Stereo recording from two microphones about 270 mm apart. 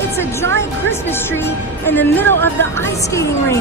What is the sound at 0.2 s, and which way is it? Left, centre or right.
A woman's voice, centre.